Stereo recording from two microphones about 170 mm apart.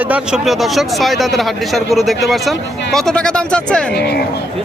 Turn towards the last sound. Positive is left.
turn(degrees=70)  # may be behind; listen again after turning